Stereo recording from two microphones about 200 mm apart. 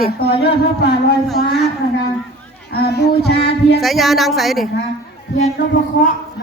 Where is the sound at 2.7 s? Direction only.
55° left (ahead or behind).